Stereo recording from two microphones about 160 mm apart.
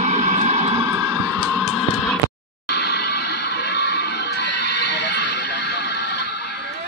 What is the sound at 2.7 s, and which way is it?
Music, 90° left.